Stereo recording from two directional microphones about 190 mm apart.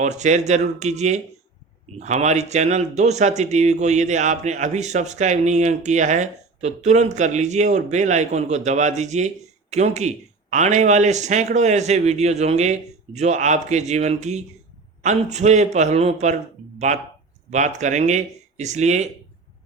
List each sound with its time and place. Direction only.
0.0 s speech: 40° right (ahead or behind)